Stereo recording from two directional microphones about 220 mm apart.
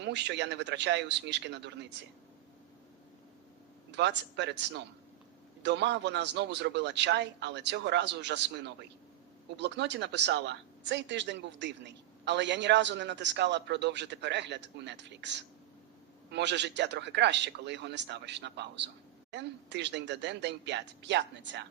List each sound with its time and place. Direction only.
0.0 s a woman's voice: 55° right (ahead or behind)
3.9 s a woman's voice: 50° right (ahead or behind)